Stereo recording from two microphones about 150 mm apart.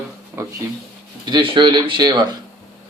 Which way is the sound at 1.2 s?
35° right (ahead or behind).